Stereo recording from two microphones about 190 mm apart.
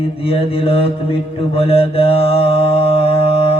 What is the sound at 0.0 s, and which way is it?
Mantra, 30° left (ahead or behind).